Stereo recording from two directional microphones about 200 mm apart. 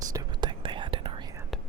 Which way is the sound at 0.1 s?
20° right (ahead or behind).